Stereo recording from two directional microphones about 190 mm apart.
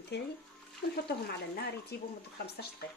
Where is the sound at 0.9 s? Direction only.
60° left (ahead or behind).